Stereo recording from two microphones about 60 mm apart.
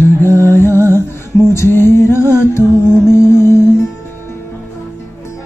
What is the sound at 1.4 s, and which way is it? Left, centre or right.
Music, left.